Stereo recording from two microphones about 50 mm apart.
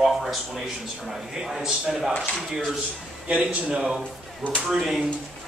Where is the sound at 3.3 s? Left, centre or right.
Right.